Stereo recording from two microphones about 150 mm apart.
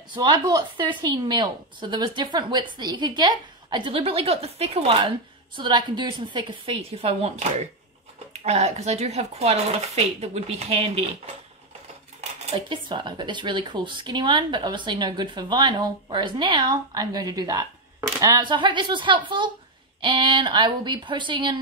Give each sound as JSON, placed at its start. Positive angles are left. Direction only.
{"t": 0.1, "sound": "speech", "side_deg": -30}
{"t": 5.6, "sound": "speech", "side_deg": -30}
{"t": 12.2, "sound": "speech", "side_deg": -40}